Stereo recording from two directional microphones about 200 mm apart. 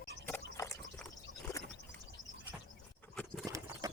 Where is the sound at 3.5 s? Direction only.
15° right (ahead or behind).